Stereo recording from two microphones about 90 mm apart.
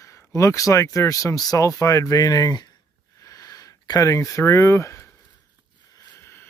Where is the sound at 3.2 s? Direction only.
40° left (ahead or behind).